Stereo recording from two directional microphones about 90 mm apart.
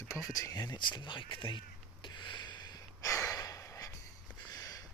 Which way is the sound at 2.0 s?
60° left (ahead or behind).